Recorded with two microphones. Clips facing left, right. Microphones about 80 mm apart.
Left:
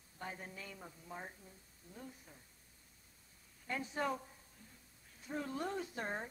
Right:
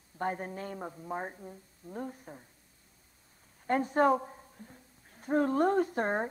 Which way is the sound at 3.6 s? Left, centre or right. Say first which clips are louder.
Right 13 dB; right.